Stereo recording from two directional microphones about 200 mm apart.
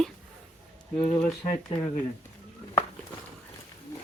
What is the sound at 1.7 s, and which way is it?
Speech, 25° left (ahead or behind).